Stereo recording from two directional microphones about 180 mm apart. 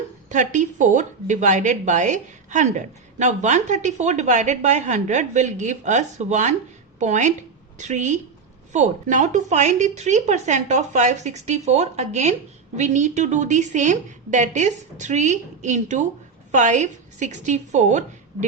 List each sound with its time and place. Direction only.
0.3 s a woman's voice: 45° right (ahead or behind)